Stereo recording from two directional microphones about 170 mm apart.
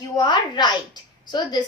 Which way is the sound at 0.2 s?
25° left (ahead or behind).